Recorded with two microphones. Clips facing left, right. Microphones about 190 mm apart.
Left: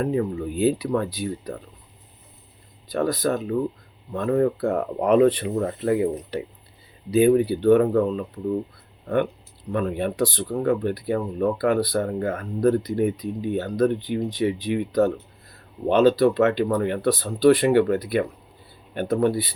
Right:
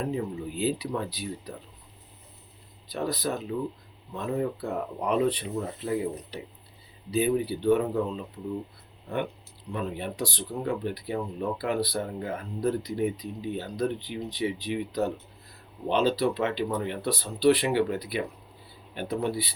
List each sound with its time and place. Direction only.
0.0 s speech: 60° left (ahead or behind)
2.9 s speech: 50° left (ahead or behind)
9.7 s speech: 60° left (ahead or behind)